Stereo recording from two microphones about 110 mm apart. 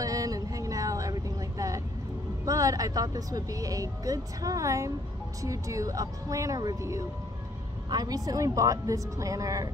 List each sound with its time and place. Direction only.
0.0 s vehicle: 30° right (ahead or behind)
2.4 s speech: 30° right (ahead or behind)